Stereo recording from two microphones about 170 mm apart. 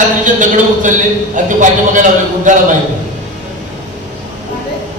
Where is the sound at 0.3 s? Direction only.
50° right (ahead or behind).